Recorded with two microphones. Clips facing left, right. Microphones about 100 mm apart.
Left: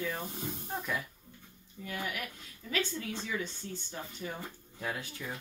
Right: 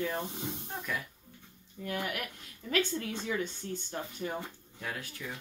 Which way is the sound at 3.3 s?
55° right (ahead or behind).